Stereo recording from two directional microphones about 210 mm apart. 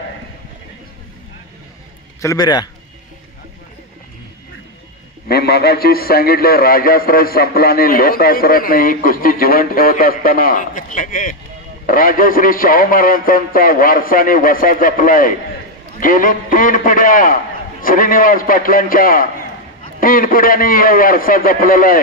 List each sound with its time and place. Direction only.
2.2 s a man's voice: 20° left (ahead or behind)
5.3 s a man's voice: 50° left (ahead or behind)